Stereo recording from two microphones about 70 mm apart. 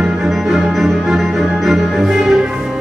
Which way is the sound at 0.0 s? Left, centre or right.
Centre.